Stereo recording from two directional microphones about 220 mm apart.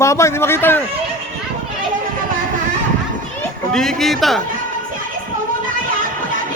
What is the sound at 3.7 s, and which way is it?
Speech, centre (ahead or behind).